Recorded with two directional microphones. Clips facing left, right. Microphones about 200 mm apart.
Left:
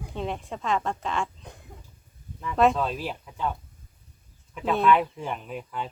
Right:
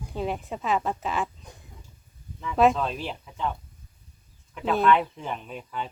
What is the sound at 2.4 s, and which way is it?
Speech, centre (ahead or behind).